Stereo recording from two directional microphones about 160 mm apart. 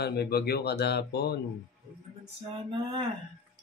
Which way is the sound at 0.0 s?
85° left.